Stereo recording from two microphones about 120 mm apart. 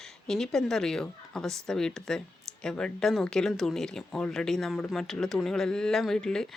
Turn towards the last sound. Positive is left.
turn(degrees=5)  # may be behind; listen again after turning